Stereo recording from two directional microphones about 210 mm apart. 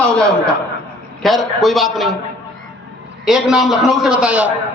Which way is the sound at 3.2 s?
Centre (ahead or behind).